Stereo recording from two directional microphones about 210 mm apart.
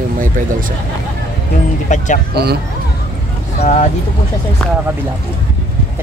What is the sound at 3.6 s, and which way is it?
Speech, 35° left (ahead or behind).